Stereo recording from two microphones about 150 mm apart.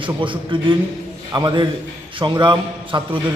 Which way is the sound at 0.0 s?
35° right (ahead or behind).